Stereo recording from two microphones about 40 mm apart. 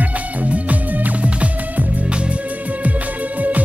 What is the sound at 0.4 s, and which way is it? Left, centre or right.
Music, right.